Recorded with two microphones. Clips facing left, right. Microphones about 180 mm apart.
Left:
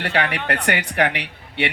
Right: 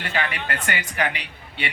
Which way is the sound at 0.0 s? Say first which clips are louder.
Left 5 dB; 65° left (ahead or behind).